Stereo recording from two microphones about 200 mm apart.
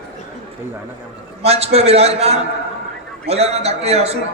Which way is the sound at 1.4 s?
30° right (ahead or behind).